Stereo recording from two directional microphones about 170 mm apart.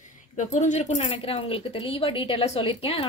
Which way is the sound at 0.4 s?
45° left (ahead or behind).